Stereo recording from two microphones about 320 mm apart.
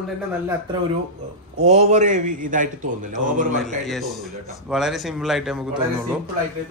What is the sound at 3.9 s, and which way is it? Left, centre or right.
Speech, centre.